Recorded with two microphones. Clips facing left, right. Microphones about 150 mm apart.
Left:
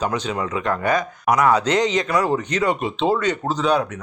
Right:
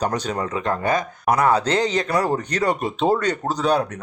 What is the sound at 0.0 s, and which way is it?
Speech, 40° right (ahead or behind).